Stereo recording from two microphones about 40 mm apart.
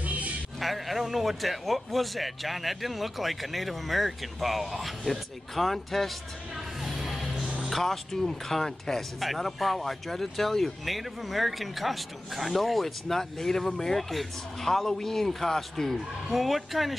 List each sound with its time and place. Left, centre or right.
0.0 s music: right
0.6 s speech: centre
6.8 s music: centre
7.6 s speech: centre
9.2 s speech: centre